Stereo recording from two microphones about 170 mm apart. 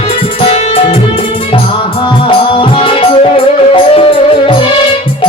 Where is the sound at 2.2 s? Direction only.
30° left (ahead or behind).